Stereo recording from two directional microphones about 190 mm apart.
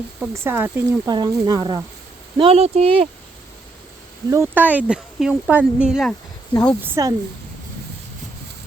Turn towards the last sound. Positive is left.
turn(degrees=-15)  # may be behind; listen again after turning